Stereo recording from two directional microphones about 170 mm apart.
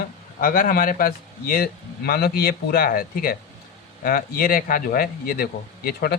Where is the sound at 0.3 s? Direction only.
55° left (ahead or behind).